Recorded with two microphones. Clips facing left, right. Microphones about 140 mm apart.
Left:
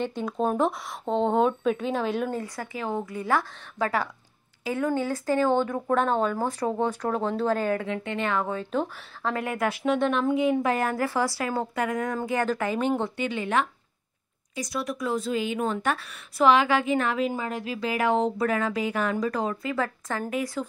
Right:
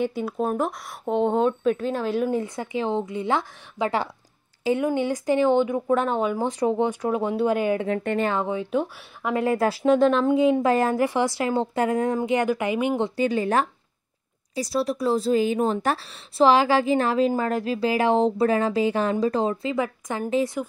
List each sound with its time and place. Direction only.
0.0 s speech: 10° right (ahead or behind)
1.0 s speech: 15° right (ahead or behind)
1.3 s speech: centre (ahead or behind)
2.3 s speech: 20° right (ahead or behind)
8.2 s a woman's voice: 30° right (ahead or behind)
8.5 s speech: 15° right (ahead or behind)
9.4 s speech: 30° right (ahead or behind)
12.2 s speech: 15° right (ahead or behind)
13.1 s a woman's voice: 40° right (ahead or behind)